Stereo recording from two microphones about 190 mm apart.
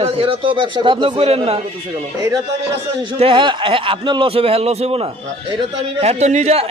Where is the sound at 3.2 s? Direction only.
25° right (ahead or behind).